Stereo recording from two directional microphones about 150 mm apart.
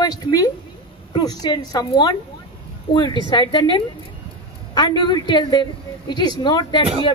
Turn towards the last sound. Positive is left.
turn(degrees=30)  # may be behind; listen again after turning